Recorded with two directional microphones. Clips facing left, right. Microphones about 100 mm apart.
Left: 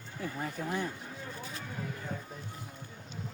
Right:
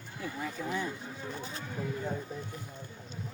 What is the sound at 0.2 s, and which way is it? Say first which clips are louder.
Speech: even; 45° left (ahead or behind).